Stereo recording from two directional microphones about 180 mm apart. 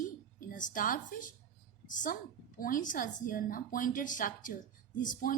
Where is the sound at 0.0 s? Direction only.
50° left (ahead or behind).